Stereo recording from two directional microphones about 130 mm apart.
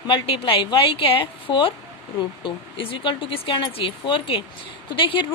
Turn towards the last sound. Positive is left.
turn(degrees=40)  # may be behind; listen again after turning